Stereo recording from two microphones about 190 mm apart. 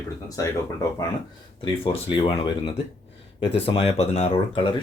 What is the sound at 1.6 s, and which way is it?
Speech, 25° left (ahead or behind).